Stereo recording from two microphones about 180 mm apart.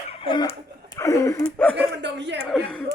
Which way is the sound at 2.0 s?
75° right (ahead or behind).